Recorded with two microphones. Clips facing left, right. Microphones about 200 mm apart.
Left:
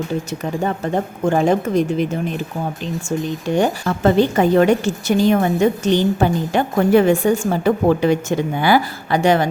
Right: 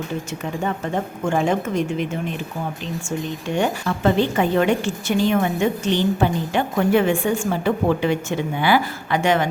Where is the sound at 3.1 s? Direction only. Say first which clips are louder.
Left 5 dB; 40° left (ahead or behind).